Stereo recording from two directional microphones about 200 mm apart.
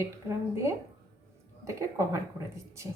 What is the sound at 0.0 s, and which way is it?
A woman's voice, 15° right (ahead or behind).